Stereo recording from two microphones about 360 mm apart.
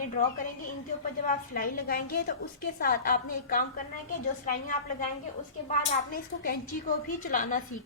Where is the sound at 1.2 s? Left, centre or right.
Left.